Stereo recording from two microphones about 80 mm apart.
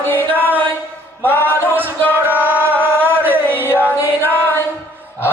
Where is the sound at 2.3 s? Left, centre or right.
Right.